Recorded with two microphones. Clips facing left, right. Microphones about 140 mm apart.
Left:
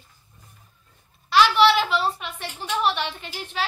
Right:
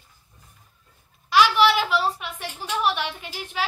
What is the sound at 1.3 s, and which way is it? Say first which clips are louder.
A woman's voice: left 1 dB; 10° right (ahead or behind).